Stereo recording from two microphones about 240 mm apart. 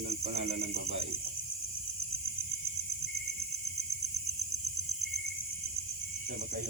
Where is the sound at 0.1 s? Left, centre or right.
Right.